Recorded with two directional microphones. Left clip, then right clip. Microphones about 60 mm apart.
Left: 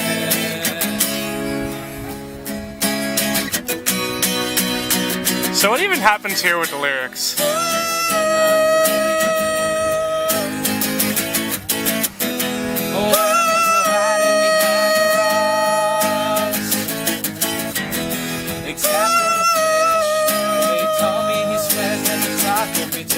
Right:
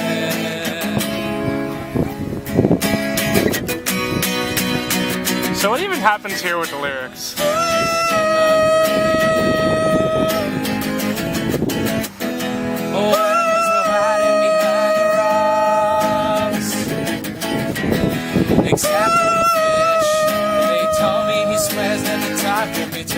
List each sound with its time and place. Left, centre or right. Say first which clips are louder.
5.5 s speech: left 4 dB; left
7.4 s music: right 3 dB; centre
13.1 s music: even; left
18.9 s music: left 1 dB; left
21.2 s music: right 1 dB; right